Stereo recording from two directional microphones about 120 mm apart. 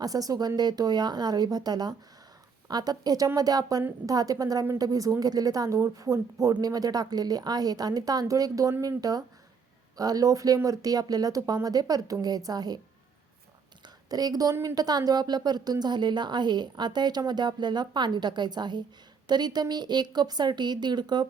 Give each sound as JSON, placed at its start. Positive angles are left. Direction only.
{"t": 0.0, "sound": "a woman's voice", "side_deg": -30}
{"t": 14.1, "sound": "a woman's voice", "side_deg": -35}
{"t": 14.5, "sound": "speech", "side_deg": -20}
{"t": 14.8, "sound": "a woman's voice", "side_deg": -35}